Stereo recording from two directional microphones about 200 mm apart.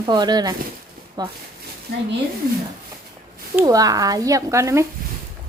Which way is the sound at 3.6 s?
15° right (ahead or behind).